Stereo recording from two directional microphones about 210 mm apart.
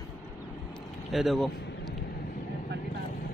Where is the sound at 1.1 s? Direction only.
Centre (ahead or behind).